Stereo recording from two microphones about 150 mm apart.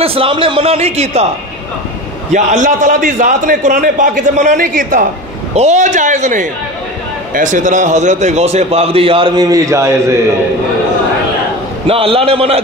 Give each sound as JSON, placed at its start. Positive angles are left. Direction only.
{"t": 0.0, "sound": "a man's voice", "side_deg": -40}
{"t": 2.3, "sound": "a man's voice", "side_deg": -55}
{"t": 11.9, "sound": "a man's voice", "side_deg": -40}